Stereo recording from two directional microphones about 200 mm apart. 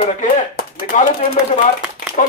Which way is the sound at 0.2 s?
40° left (ahead or behind).